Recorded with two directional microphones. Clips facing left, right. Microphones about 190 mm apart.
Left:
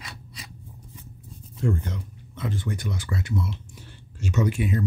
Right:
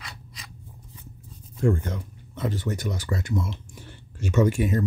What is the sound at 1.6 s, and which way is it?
Speech, 45° right (ahead or behind).